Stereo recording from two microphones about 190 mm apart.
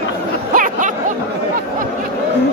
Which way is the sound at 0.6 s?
45° right (ahead or behind).